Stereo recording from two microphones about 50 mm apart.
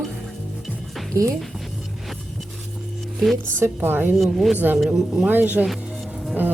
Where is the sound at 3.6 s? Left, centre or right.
Right.